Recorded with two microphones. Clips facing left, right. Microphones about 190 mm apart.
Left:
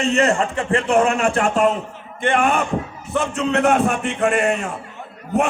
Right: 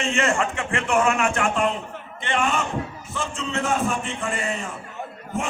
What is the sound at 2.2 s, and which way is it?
A man's voice, 55° left (ahead or behind).